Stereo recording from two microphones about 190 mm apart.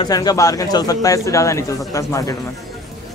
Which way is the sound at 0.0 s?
20° left (ahead or behind).